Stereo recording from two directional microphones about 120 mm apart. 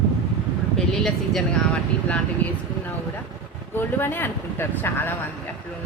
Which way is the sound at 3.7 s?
15° left (ahead or behind).